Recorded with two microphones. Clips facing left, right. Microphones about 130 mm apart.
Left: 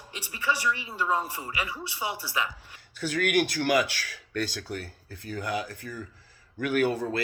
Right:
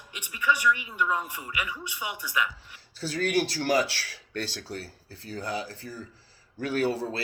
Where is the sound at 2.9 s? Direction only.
30° right (ahead or behind).